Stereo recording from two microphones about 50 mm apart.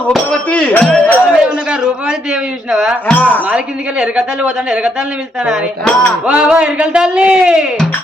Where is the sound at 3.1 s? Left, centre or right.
Left.